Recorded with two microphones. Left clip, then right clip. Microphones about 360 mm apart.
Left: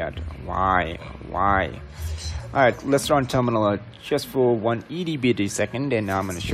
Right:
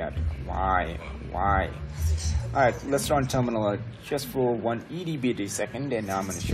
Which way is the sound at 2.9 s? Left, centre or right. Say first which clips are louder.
Left 5 dB; left.